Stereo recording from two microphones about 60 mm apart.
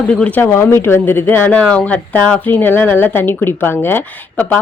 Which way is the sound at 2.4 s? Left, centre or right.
Left.